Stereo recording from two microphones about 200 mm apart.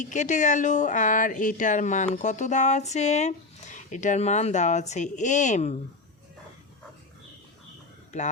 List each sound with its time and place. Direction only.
0.0 s speech: 40° left (ahead or behind)
8.1 s speech: 35° left (ahead or behind)